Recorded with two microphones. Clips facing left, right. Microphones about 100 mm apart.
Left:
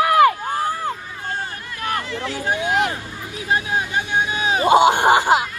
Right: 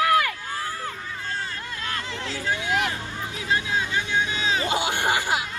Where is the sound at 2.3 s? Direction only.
20° left (ahead or behind).